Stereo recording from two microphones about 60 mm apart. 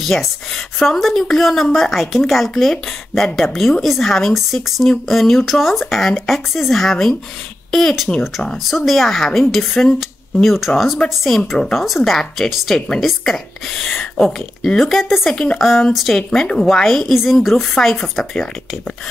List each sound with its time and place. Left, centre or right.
0.0 s a woman's voice: centre
15.6 s speech: centre